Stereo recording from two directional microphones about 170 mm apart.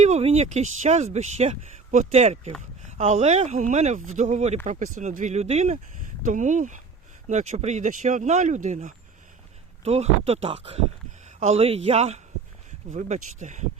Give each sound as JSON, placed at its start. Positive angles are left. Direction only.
{"t": 0.0, "sound": "speech", "side_deg": -40}